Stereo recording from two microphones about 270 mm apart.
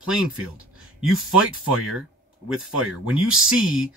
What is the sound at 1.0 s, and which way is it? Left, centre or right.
Speech, centre.